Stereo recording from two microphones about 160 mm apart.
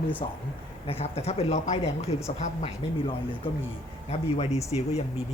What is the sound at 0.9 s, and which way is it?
Speech, 40° left (ahead or behind).